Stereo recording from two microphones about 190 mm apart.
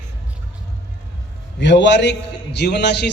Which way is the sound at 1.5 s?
70° left (ahead or behind).